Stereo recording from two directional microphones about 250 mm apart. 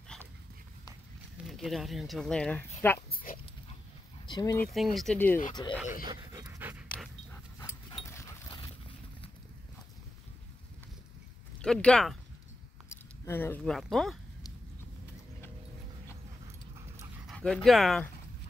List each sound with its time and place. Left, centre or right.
1.5 s speech: centre
3.1 s dog: left
4.3 s speech: centre
4.7 s speech: centre
5.6 s speech: centre
6.0 s pant: centre
8.1 s dog: centre
11.6 s speech: centre
17.3 s speech: centre